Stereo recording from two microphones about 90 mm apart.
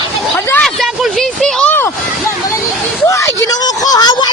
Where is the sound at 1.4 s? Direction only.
10° left (ahead or behind).